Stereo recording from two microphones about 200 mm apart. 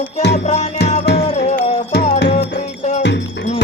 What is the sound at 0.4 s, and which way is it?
Music, 35° left (ahead or behind).